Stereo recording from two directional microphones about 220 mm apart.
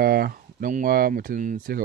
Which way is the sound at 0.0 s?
45° right (ahead or behind).